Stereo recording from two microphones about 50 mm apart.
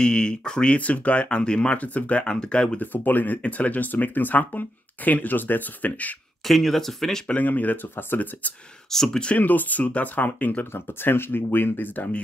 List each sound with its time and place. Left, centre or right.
0.0 s speech: centre
0.7 s speech: left
2.8 s speech: left
6.4 s speech: centre
7.3 s speech: left
8.9 s speech: centre
9.4 s speech: left
10.7 s speech: left